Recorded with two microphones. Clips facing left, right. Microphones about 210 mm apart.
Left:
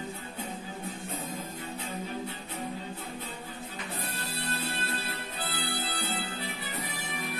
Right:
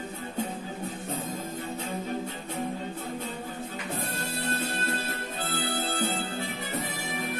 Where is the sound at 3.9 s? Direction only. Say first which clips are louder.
Right 6 dB; 45° right (ahead or behind).